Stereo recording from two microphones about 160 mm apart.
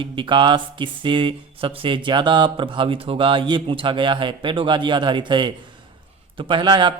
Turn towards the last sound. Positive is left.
turn(degrees=-30)  # may be behind; listen again after turning